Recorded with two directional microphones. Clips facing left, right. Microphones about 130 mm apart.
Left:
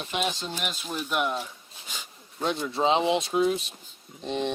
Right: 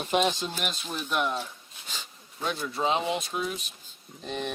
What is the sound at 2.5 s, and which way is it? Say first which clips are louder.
Speech: left 3 dB; 25° left (ahead or behind).